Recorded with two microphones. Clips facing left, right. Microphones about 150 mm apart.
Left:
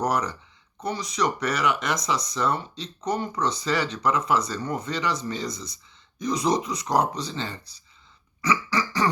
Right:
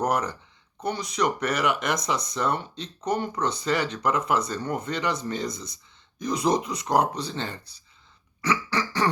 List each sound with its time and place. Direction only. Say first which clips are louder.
0.0 s speech: even; 55° right (ahead or behind)
8.4 s burping: left 1 dB; 60° right (ahead or behind)